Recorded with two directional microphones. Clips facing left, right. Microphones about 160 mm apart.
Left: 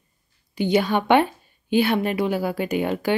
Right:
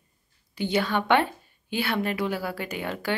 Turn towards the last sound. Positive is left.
turn(degrees=15)  # may be behind; listen again after turning